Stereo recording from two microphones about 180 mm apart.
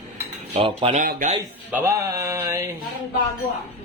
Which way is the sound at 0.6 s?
30° right (ahead or behind).